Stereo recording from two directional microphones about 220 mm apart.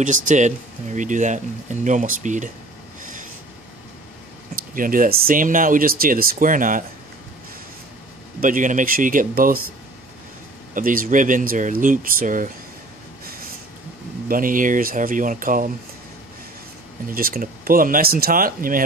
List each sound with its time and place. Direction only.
0.0 s speech: 35° right (ahead or behind)
3.0 s a sound: 35° right (ahead or behind)
4.7 s speech: 40° right (ahead or behind)
8.4 s speech: 35° right (ahead or behind)
10.7 s speech: 40° right (ahead or behind)
14.3 s speech: 40° right (ahead or behind)
17.1 s speech: 40° right (ahead or behind)